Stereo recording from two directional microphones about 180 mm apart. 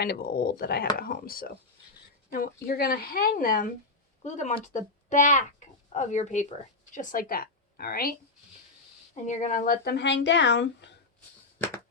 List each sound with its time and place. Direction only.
0.0 s speech: 60° left (ahead or behind)
2.6 s a woman's voice: 55° left (ahead or behind)
9.2 s speech: 40° left (ahead or behind)
9.8 s a woman's voice: 70° left (ahead or behind)